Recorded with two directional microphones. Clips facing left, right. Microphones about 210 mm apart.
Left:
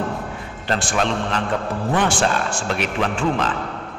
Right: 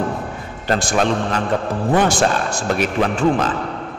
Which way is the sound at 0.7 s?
40° right (ahead or behind).